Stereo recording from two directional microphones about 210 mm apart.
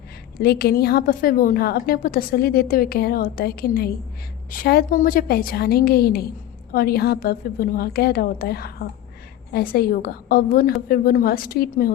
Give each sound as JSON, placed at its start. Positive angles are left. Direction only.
{"t": 0.4, "sound": "a woman's voice", "side_deg": 50}